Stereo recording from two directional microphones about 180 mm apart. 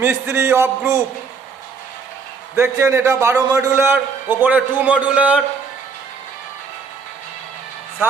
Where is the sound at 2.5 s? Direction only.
15° right (ahead or behind).